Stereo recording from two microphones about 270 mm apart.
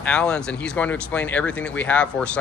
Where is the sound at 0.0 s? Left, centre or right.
Centre.